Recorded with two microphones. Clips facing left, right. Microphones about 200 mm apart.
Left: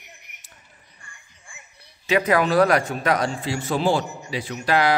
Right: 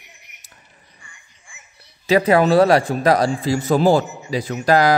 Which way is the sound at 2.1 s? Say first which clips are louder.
Right 5 dB; 30° right (ahead or behind).